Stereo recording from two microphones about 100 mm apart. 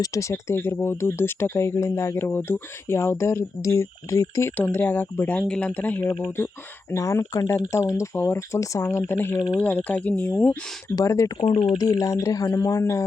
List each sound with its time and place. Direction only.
0.0 s speech: 30° left (ahead or behind)
4.5 s speech: 20° left (ahead or behind)
10.9 s speech: 30° left (ahead or behind)